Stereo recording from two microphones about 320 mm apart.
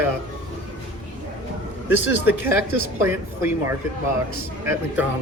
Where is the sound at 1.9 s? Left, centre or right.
Left.